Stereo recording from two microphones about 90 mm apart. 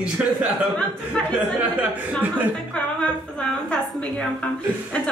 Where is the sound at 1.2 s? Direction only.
10° left (ahead or behind).